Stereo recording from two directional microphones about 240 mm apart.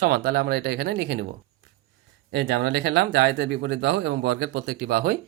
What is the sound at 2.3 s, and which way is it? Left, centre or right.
A man's voice, right.